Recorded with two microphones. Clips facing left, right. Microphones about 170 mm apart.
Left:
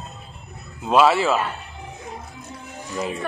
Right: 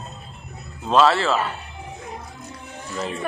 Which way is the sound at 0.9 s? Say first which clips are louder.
Left 1 dB; 10° left (ahead or behind).